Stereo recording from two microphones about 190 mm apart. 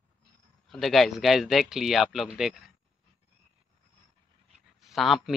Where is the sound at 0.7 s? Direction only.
Centre (ahead or behind).